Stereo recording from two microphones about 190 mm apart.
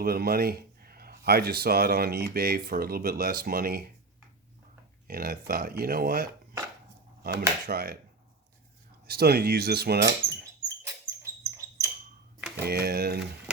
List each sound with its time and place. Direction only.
0.0 s speech: 50° right (ahead or behind)
5.0 s speech: 50° right (ahead or behind)
9.0 s speech: 55° right (ahead or behind)
11.2 s dog: 15° right (ahead or behind)
12.4 s power windows: 10° right (ahead or behind)
12.6 s speech: 55° right (ahead or behind)